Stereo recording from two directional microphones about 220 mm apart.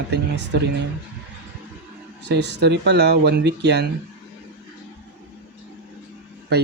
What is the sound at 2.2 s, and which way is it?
Speech, 50° right (ahead or behind).